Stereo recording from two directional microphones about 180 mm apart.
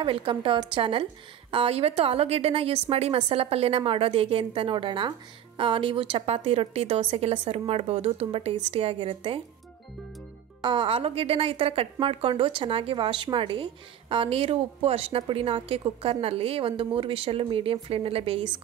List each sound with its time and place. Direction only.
0.0 s a woman's voice: 30° right (ahead or behind)
10.6 s a woman's voice: 25° right (ahead or behind)